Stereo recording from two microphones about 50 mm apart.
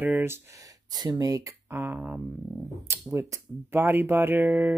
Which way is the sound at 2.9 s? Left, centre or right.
Right.